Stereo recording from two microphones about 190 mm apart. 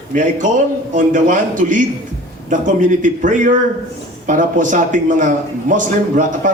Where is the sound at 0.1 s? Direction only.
40° right (ahead or behind).